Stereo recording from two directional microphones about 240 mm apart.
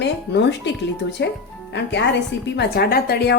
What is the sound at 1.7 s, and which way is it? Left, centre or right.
Speech, left.